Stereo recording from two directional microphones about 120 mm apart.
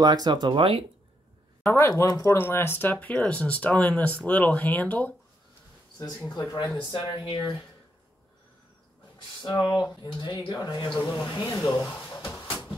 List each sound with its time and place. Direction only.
0.0 s speech: 35° right (ahead or behind)
1.7 s speech: 20° left (ahead or behind)
6.2 s speech: 35° left (ahead or behind)
9.4 s speech: 35° left (ahead or behind)